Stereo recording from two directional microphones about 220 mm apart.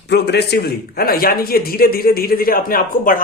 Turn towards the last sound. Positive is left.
turn(degrees=40)  # may be behind; listen again after turning